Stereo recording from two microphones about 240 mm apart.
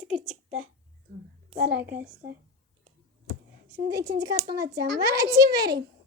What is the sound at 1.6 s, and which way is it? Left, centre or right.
Speech, centre.